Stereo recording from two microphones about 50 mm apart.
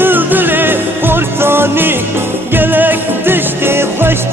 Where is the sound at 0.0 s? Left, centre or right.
Right.